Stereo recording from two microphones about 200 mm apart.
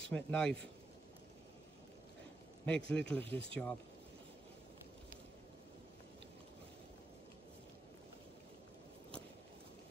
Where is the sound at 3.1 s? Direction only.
10° left (ahead or behind).